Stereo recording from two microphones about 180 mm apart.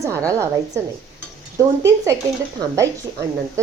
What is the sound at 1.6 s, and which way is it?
Speech, 15° right (ahead or behind).